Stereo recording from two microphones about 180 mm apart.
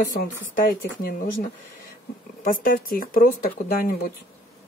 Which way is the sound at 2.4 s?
50° left (ahead or behind).